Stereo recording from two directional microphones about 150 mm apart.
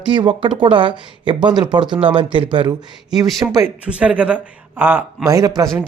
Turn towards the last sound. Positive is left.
turn(degrees=-20)  # may be behind; listen again after turning